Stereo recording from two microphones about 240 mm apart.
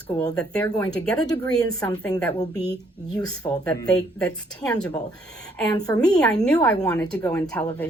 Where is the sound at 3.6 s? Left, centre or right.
Centre.